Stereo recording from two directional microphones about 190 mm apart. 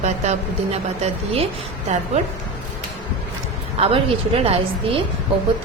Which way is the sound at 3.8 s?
30° right (ahead or behind).